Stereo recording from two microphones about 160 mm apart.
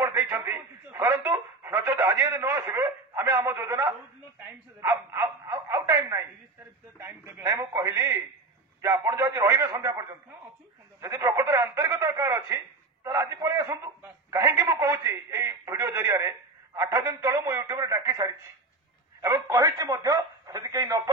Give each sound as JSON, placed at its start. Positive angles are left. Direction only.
{"t": 0.0, "sound": "speech", "side_deg": -15}
{"t": 19.4, "sound": "speech", "side_deg": -20}